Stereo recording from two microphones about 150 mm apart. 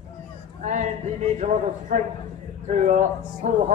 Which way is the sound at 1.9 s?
50° right (ahead or behind).